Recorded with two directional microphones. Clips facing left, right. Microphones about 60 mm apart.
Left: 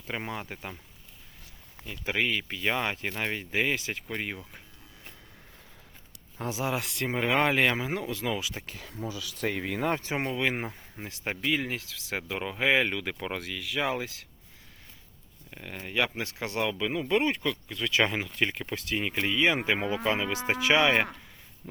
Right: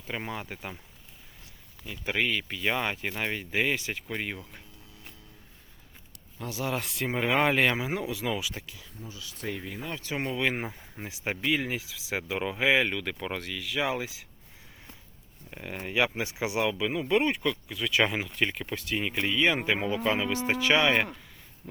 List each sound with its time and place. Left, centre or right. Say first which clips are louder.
0.1 s speech: even; centre
1.8 s speech: even; centre
6.5 s speech: left 1 dB; centre
6.7 s speech: even; centre
8.8 s speech: left 7 dB; left
9.9 s speech: left 5 dB; left
10.3 s speech: even; centre
15.4 s speech: right 3 dB; centre